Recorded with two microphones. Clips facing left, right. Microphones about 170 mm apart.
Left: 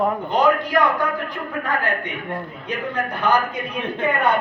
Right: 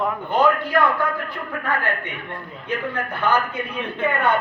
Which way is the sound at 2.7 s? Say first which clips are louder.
Even; 15° left (ahead or behind).